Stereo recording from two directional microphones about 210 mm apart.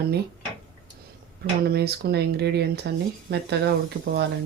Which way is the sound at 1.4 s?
50° right (ahead or behind).